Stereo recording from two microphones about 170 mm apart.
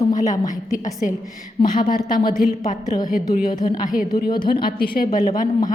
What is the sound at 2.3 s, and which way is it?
Speech, 50° left (ahead or behind).